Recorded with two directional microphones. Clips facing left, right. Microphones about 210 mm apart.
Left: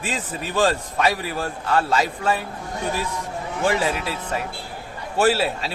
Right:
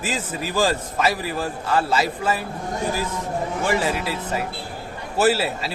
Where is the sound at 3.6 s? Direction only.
Centre (ahead or behind).